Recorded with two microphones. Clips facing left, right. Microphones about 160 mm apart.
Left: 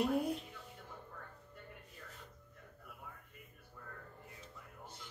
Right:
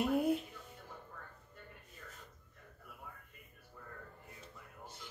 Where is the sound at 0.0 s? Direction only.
Centre (ahead or behind).